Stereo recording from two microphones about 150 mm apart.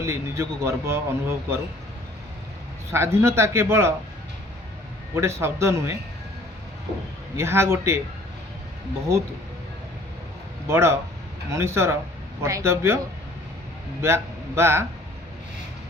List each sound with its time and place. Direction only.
0.0 s speech: 20° right (ahead or behind)
2.9 s speech: 15° right (ahead or behind)
5.1 s speech: 15° right (ahead or behind)
7.3 s speech: 15° right (ahead or behind)
10.7 s speech: 15° right (ahead or behind)
14.0 s speech: 15° right (ahead or behind)